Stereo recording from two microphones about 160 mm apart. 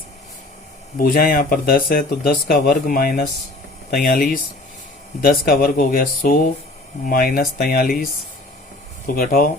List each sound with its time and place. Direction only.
0.9 s speech: 65° left (ahead or behind)
9.0 s speech: 60° left (ahead or behind)